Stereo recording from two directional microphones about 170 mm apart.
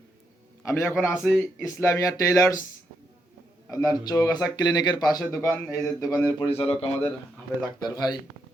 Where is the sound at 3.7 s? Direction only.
20° left (ahead or behind).